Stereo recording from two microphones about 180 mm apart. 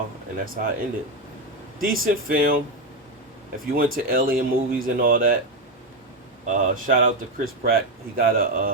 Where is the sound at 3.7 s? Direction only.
50° right (ahead or behind).